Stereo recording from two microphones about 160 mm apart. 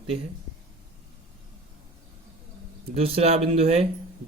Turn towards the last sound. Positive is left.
turn(degrees=-40)  # may be behind; listen again after turning